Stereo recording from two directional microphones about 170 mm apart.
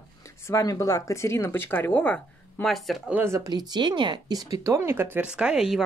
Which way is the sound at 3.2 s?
20° right (ahead or behind).